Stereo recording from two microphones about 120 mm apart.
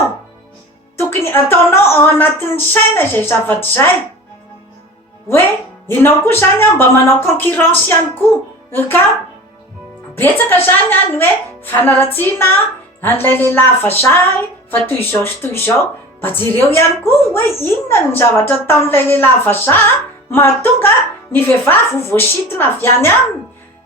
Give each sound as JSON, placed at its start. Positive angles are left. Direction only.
{"t": 0.9, "sound": "a woman's voice", "side_deg": 20}
{"t": 5.9, "sound": "a woman's voice", "side_deg": 20}
{"t": 10.2, "sound": "a woman's voice", "side_deg": 20}